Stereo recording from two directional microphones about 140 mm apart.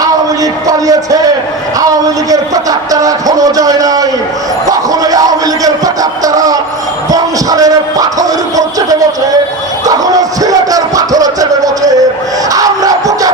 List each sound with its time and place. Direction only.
0.7 s music: 25° right (ahead or behind)
1.8 s speech: 25° right (ahead or behind)
4.7 s a sound: 25° right (ahead or behind)
5.6 s speech: 25° right (ahead or behind)
7.1 s music: 25° right (ahead or behind)